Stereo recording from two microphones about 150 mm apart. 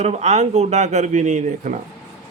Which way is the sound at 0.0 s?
45° right (ahead or behind).